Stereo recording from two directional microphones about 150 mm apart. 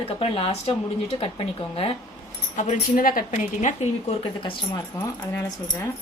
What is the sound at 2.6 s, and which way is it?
Speech, 55° left (ahead or behind).